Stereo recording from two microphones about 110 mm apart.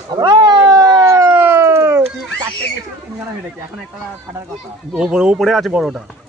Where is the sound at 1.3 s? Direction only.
15° right (ahead or behind).